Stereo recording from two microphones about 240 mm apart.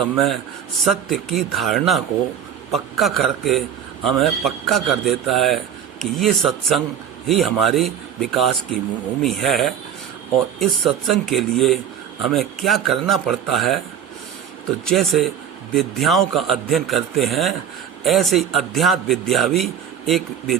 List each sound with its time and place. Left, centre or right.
0.0 s a man's voice: centre
14.8 s a man's voice: centre